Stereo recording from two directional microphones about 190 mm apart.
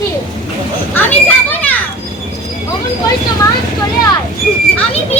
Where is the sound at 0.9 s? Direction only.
10° left (ahead or behind).